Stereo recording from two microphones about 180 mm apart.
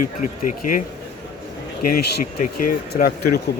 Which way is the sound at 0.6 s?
45° left (ahead or behind).